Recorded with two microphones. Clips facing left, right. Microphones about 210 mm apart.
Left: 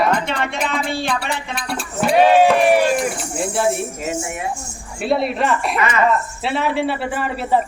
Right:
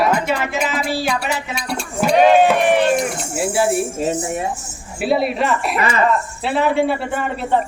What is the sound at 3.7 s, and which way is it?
Speech, 30° right (ahead or behind).